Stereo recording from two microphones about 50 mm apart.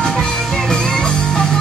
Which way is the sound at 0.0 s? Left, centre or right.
Centre.